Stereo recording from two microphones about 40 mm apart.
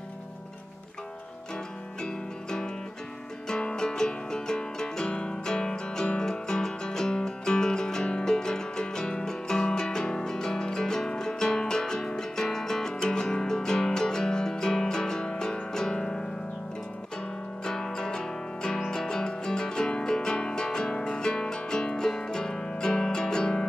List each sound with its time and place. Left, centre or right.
2.0 s music: centre
17.6 s music: centre